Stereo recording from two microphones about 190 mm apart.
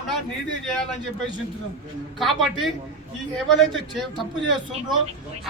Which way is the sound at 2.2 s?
Centre (ahead or behind).